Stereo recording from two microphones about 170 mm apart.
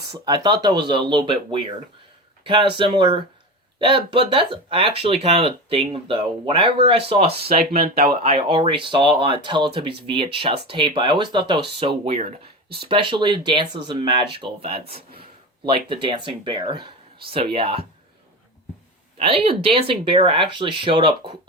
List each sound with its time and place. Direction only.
0.3 s speech: 25° right (ahead or behind)
19.1 s speech: 35° right (ahead or behind)